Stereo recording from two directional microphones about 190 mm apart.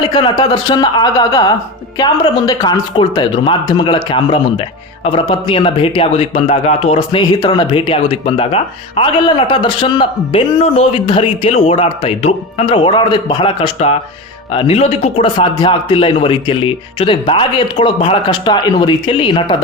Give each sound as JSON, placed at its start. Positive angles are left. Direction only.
{"t": 0.0, "sound": "speech", "side_deg": 25}